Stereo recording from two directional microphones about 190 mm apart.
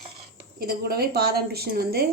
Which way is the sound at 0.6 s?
50° right (ahead or behind).